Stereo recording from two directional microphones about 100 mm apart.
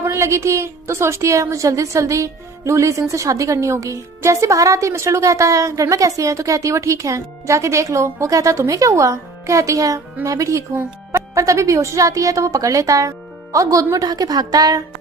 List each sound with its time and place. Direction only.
0.0 s a woman's voice: 30° right (ahead or behind)